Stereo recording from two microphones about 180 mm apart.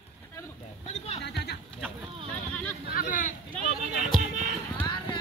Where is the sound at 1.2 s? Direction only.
65° left (ahead or behind).